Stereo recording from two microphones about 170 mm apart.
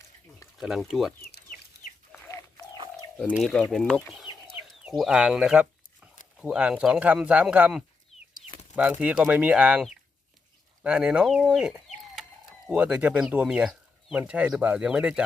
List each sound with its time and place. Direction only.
0.6 s speech: centre (ahead or behind)
1.2 s chicken: 65° left (ahead or behind)
2.1 s chicken: 15° left (ahead or behind)
3.3 s speech: 5° left (ahead or behind)
4.7 s a sound: centre (ahead or behind)
6.3 s speech: 5° right (ahead or behind)